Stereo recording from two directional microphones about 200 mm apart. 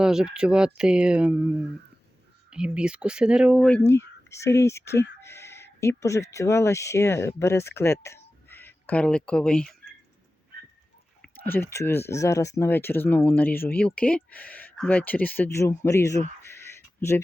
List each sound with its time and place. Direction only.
0.0 s speech: 5° right (ahead or behind)
3.7 s speech: 10° left (ahead or behind)
11.2 s speech: 10° left (ahead or behind)
16.5 s a sound: 15° left (ahead or behind)